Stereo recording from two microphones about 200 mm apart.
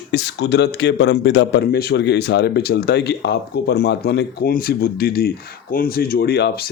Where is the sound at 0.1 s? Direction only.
60° left (ahead or behind).